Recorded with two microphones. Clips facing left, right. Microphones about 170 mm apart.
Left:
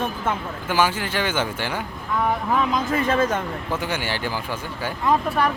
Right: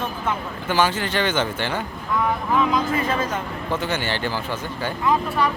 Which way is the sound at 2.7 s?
50° left (ahead or behind).